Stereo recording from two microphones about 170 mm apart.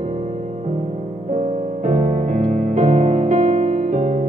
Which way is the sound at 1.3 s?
40° right (ahead or behind).